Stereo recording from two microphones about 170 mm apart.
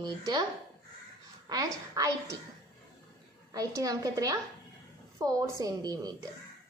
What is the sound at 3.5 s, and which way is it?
A woman's voice, 20° right (ahead or behind).